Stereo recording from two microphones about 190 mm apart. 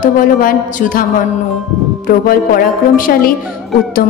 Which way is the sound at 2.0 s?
50° left (ahead or behind).